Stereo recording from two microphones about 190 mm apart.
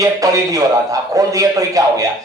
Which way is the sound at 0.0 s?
20° right (ahead or behind).